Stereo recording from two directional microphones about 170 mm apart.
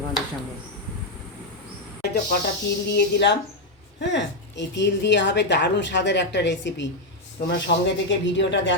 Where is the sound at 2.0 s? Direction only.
75° left (ahead or behind).